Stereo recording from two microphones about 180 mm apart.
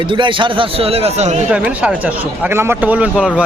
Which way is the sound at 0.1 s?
30° right (ahead or behind).